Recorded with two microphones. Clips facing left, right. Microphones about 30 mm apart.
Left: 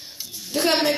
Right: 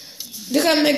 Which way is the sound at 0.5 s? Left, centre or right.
Right.